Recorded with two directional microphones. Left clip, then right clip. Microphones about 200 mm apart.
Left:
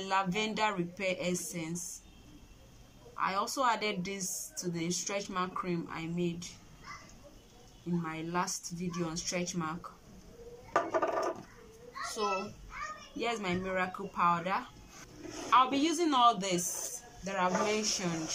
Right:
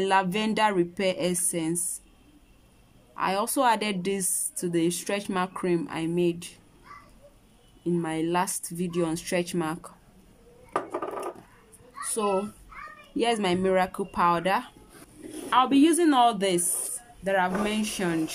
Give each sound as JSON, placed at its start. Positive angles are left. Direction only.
{"t": 0.0, "sound": "speech", "side_deg": -50}
{"t": 3.2, "sound": "speech", "side_deg": -50}
{"t": 8.0, "sound": "speech", "side_deg": -50}
{"t": 10.7, "sound": "a sound", "side_deg": -5}
{"t": 13.2, "sound": "speech", "side_deg": -50}
{"t": 15.5, "sound": "speech", "side_deg": -40}